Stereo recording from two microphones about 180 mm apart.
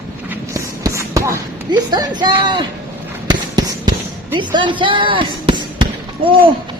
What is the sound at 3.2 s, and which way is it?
Music, 25° right (ahead or behind).